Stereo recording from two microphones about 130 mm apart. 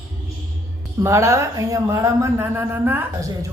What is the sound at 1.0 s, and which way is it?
Speech, 25° right (ahead or behind).